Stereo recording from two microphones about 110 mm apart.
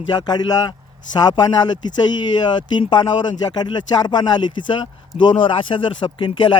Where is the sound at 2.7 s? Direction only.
40° left (ahead or behind).